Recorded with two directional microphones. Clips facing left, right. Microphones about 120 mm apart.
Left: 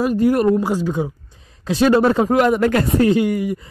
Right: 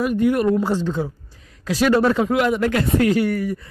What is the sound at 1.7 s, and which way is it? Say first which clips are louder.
Speech: left 3 dB; 25° left (ahead or behind).